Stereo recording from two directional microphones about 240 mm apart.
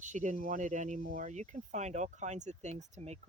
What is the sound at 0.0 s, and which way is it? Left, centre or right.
Speech, right.